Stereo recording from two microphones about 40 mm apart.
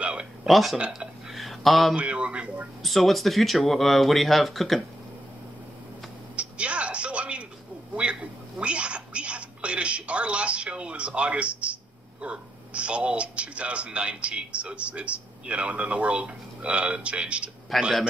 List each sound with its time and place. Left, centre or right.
0.0 s a sound: right
0.4 s speech: centre
1.3 s a sound: centre
2.0 s a man's voice: right
2.8 s speech: centre
6.3 s television: right
7.9 s a woman's voice: right
17.7 s speech: centre